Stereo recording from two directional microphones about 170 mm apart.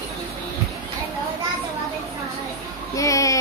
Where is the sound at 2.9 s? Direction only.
20° left (ahead or behind).